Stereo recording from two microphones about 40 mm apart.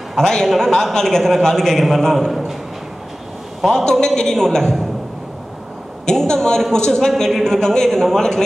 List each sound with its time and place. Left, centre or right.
0.2 s a man's voice: centre
3.6 s a man's voice: centre
6.0 s a man's voice: centre